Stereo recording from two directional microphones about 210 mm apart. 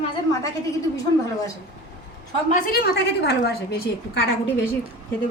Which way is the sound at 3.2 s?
50° left (ahead or behind).